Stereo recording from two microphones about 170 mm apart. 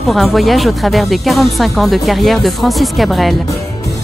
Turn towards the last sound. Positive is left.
turn(degrees=0)  # may be behind; listen again after turning